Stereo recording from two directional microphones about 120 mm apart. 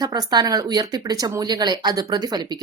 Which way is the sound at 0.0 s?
30° right (ahead or behind).